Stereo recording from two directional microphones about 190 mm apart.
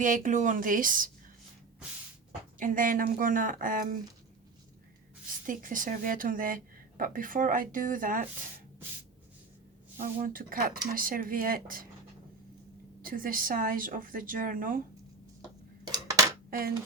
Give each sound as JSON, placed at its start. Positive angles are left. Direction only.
{"t": 0.0, "sound": "a woman's voice", "side_deg": -40}
{"t": 2.6, "sound": "a woman's voice", "side_deg": -45}
{"t": 5.5, "sound": "a woman's voice", "side_deg": -45}
{"t": 10.0, "sound": "a woman's voice", "side_deg": -45}
{"t": 13.0, "sound": "a woman's voice", "side_deg": -45}
{"t": 16.5, "sound": "dishes", "side_deg": -50}